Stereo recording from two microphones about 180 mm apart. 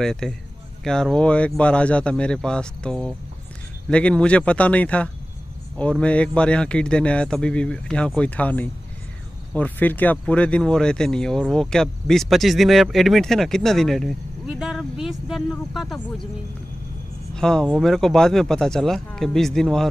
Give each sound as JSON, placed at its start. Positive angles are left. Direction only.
{"t": 0.0, "sound": "speech", "side_deg": 5}
{"t": 17.4, "sound": "speech", "side_deg": 5}